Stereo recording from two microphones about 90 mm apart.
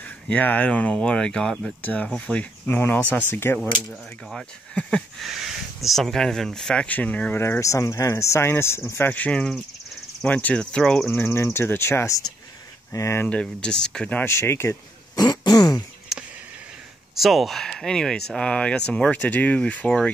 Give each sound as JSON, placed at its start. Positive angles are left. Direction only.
{"t": 0.3, "sound": "speech", "side_deg": 20}
{"t": 1.8, "sound": "speech", "side_deg": 15}
{"t": 5.2, "sound": "speech", "side_deg": -5}
{"t": 7.3, "sound": "speech", "side_deg": 25}
{"t": 11.2, "sound": "speech", "side_deg": 30}
{"t": 13.2, "sound": "speech", "side_deg": 10}
{"t": 14.2, "sound": "speech", "side_deg": 30}
{"t": 15.1, "sound": "throat clearing", "side_deg": 50}
{"t": 16.1, "sound": "a sound", "side_deg": -5}
{"t": 17.1, "sound": "speech", "side_deg": 0}